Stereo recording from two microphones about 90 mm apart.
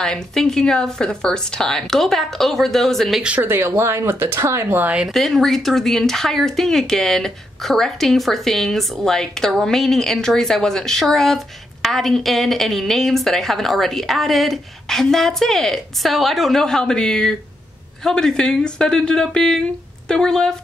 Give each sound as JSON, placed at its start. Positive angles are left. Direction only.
{"t": 0.0, "sound": "speech", "side_deg": 5}
{"t": 3.3, "sound": "speech", "side_deg": -25}
{"t": 4.9, "sound": "a woman's voice", "side_deg": 0}